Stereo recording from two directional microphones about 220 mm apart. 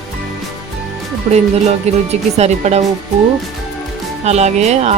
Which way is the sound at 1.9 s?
30° right (ahead or behind).